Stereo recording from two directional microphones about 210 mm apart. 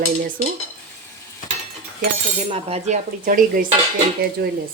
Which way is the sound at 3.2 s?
40° right (ahead or behind).